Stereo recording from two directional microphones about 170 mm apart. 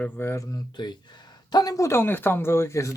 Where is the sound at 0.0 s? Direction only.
10° left (ahead or behind).